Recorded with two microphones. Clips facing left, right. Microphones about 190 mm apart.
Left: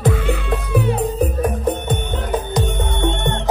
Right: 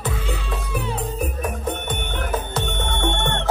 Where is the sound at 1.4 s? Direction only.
35° left (ahead or behind).